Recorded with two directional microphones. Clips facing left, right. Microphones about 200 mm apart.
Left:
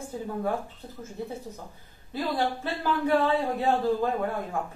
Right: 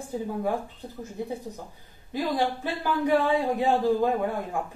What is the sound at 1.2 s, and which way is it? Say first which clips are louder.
Speech: right 3 dB; 15° right (ahead or behind).